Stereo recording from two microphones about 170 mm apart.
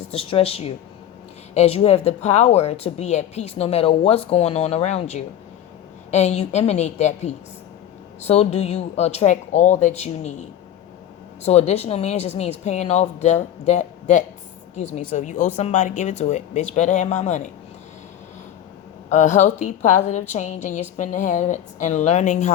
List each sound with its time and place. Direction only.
0.1 s speech: 35° left (ahead or behind)
11.4 s speech: 40° left (ahead or behind)
19.0 s speech: 45° left (ahead or behind)